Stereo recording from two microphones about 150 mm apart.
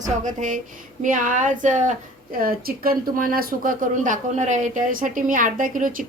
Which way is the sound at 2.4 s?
85° right.